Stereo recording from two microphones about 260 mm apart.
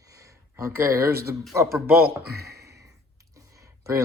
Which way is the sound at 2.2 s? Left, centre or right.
Right.